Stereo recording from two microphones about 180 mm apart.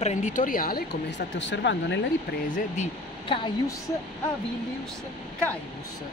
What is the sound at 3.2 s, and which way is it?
Speech, 30° left (ahead or behind).